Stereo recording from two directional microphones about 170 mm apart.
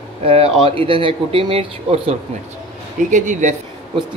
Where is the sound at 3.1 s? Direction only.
45° right (ahead or behind).